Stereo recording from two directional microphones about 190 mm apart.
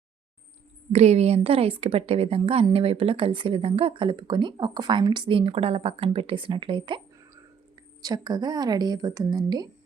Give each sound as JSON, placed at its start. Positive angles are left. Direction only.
{"t": 0.9, "sound": "a woman's voice", "side_deg": -35}
{"t": 8.0, "sound": "a woman's voice", "side_deg": -20}